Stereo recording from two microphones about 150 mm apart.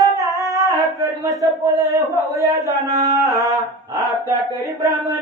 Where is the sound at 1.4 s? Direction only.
20° right (ahead or behind).